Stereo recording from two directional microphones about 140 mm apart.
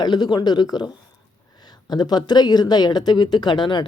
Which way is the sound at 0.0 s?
30° left (ahead or behind).